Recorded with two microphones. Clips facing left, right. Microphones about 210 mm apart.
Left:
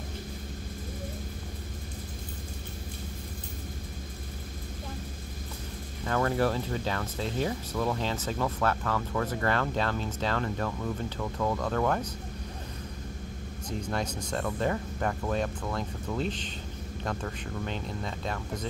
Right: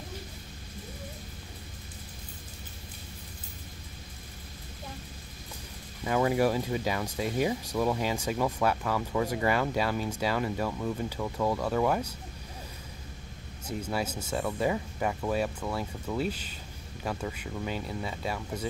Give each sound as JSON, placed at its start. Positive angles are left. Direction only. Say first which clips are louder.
{"t": 6.0, "sound": "speech", "louder": "right 2 dB", "side_deg": -10}
{"t": 13.7, "sound": "speech", "louder": "right 1 dB", "side_deg": -10}